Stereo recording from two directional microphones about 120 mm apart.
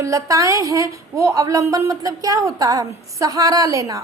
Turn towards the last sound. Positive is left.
turn(degrees=-30)  # may be behind; listen again after turning